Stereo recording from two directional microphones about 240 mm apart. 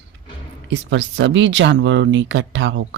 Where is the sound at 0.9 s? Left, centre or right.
Right.